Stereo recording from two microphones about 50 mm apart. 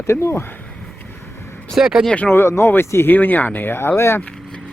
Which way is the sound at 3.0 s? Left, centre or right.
Left.